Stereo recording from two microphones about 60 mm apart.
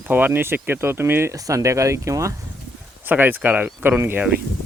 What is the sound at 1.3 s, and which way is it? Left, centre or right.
Speech, right.